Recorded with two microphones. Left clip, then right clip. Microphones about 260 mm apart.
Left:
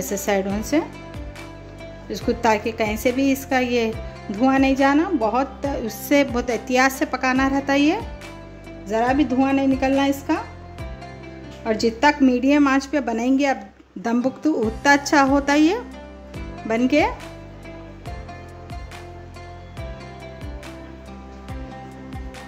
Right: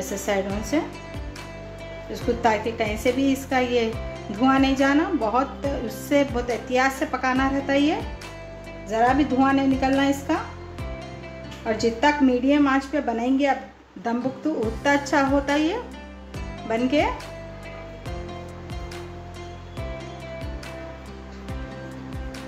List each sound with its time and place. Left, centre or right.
0.1 s a woman's voice: left
2.1 s a woman's voice: left
11.6 s a woman's voice: left